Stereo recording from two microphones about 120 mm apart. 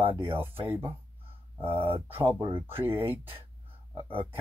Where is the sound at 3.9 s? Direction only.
45° right (ahead or behind).